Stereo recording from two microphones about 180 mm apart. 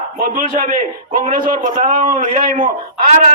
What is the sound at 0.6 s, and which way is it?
A man's voice, 50° right (ahead or behind).